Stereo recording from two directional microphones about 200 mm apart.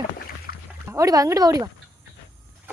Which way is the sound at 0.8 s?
15° right (ahead or behind).